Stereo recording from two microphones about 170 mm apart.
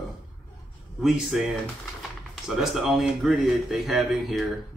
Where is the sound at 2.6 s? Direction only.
Centre (ahead or behind).